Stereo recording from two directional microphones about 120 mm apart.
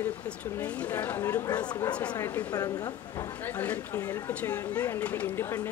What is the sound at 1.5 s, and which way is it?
A woman's voice, 35° left (ahead or behind).